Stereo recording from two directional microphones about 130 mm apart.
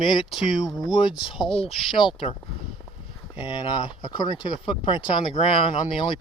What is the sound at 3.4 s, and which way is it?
Speech, 40° left (ahead or behind).